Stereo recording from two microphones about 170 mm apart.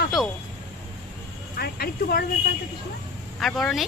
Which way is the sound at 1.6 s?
65° left (ahead or behind).